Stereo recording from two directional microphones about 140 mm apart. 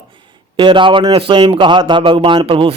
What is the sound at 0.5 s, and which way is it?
A man's voice, 35° right (ahead or behind).